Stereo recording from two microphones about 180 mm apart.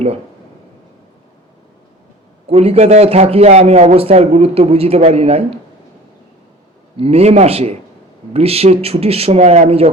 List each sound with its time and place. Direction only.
2.5 s a man's voice: 35° right (ahead or behind)
6.9 s a man's voice: 35° right (ahead or behind)